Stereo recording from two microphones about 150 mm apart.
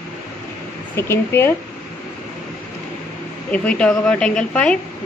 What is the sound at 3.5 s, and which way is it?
A woman's voice, 5° left (ahead or behind).